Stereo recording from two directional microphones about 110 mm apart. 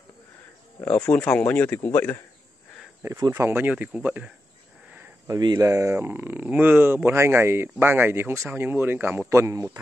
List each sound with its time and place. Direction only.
1.0 s speech: 10° left (ahead or behind)
3.0 s speech: 25° right (ahead or behind)
4.9 s cricket: 25° right (ahead or behind)
5.6 s speech: 25° right (ahead or behind)